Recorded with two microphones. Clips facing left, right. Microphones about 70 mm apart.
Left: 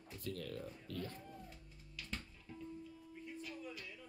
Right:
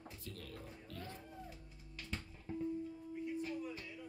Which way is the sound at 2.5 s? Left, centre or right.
Right.